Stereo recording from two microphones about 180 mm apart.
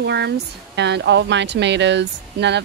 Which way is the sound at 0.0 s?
70° right (ahead or behind).